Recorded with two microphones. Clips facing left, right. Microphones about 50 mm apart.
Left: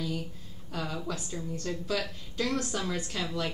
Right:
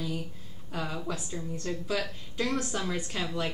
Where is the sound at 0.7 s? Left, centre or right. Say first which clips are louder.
Right 1 dB; centre.